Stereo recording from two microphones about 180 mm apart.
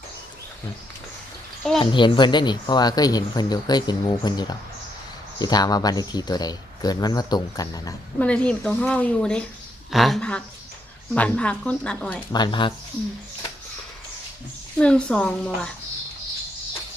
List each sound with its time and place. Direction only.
1.8 s speech: 25° left (ahead or behind)
8.2 s a woman's voice: 5° left (ahead or behind)
12.3 s speech: 25° left (ahead or behind)
14.8 s a woman's voice: 5° left (ahead or behind)